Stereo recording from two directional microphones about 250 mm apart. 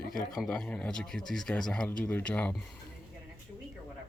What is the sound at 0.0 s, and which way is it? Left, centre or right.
Speech, left.